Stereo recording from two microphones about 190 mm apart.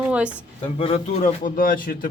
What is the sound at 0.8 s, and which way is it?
A man's voice, 30° left (ahead or behind).